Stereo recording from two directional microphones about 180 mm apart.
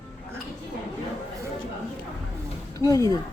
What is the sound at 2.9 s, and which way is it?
Speech, 20° left (ahead or behind).